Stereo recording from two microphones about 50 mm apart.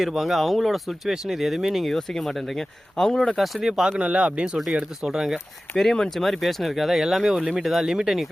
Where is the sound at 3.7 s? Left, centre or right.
Centre.